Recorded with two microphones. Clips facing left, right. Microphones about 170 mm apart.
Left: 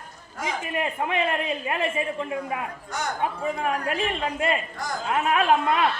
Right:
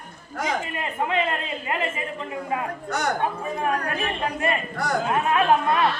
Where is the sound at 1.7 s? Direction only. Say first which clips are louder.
Left 1 dB; 20° right (ahead or behind).